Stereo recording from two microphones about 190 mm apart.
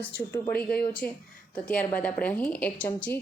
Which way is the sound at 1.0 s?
5° left (ahead or behind).